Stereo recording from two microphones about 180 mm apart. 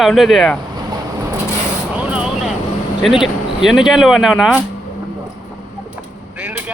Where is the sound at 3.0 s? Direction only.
Centre (ahead or behind).